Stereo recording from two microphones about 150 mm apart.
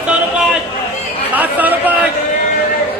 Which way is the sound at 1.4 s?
10° right (ahead or behind).